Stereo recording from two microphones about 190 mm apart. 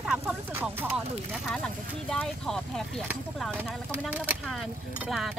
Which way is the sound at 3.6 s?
10° right (ahead or behind).